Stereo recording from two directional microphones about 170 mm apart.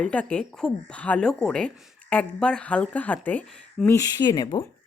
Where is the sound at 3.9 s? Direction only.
25° left (ahead or behind).